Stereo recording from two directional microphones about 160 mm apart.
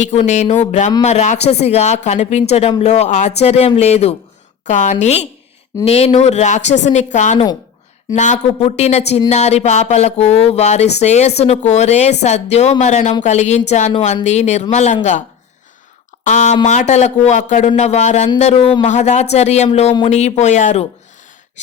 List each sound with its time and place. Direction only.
0.0 s speech: 45° left (ahead or behind)
16.2 s speech: 50° left (ahead or behind)
18.9 s speech: 50° left (ahead or behind)